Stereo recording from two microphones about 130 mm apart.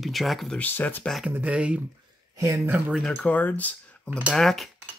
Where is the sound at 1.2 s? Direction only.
10° right (ahead or behind).